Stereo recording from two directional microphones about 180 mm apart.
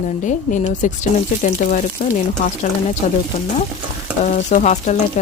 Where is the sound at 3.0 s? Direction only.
40° left (ahead or behind).